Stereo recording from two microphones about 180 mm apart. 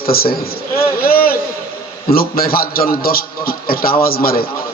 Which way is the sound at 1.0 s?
55° left (ahead or behind).